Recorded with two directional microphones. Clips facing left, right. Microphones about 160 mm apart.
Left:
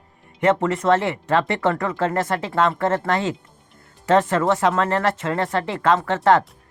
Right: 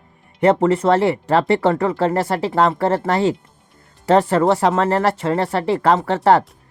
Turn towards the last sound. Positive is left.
turn(degrees=-35)  # may be behind; listen again after turning